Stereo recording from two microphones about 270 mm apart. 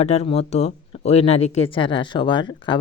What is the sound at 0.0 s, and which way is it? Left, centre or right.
Speech, left.